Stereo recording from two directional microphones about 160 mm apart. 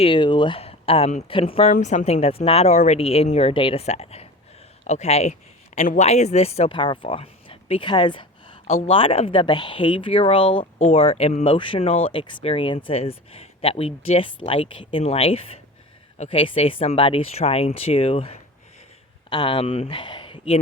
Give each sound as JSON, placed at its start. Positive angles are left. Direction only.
{"t": 0.0, "sound": "speech", "side_deg": 30}
{"t": 1.7, "sound": "speech", "side_deg": 50}
{"t": 11.5, "sound": "speech", "side_deg": 30}